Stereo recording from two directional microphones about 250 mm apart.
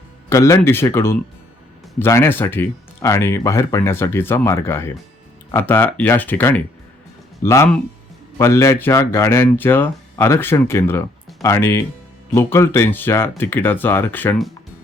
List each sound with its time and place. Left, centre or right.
0.3 s speech: centre